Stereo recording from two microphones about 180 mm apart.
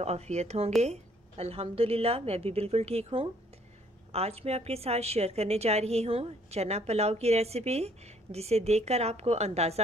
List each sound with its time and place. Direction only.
0.0 s a woman's voice: 35° right (ahead or behind)